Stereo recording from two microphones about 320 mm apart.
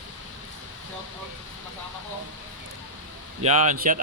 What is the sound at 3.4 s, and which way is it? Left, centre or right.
Speech, right.